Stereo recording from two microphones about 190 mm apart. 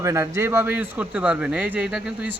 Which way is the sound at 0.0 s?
15° right (ahead or behind).